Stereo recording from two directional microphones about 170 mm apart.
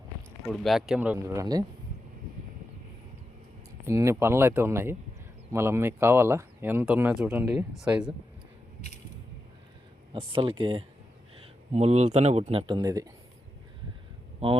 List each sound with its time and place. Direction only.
0.4 s speech: centre (ahead or behind); by 1.6 s 20° right (ahead or behind)
3.8 s speech: 15° right (ahead or behind)
10.1 s a man's voice: 30° right (ahead or behind)
14.4 s a man's voice: 35° right (ahead or behind)